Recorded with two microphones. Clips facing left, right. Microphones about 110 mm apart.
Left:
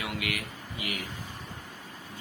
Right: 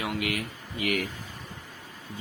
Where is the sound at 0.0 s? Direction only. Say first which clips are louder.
Right 4 dB; 30° right (ahead or behind).